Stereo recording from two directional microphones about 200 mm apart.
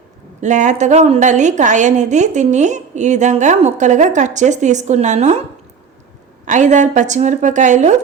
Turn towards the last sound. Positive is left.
turn(degrees=-35)  # may be behind; listen again after turning